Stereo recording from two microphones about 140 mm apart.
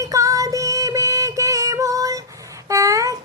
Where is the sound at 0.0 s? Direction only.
25° right (ahead or behind).